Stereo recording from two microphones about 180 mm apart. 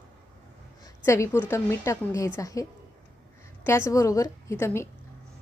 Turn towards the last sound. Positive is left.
turn(degrees=15)  # may be behind; listen again after turning